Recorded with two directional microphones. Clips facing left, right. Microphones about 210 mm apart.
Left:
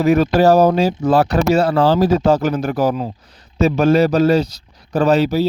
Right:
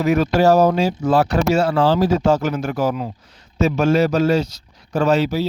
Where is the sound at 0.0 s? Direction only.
35° left (ahead or behind).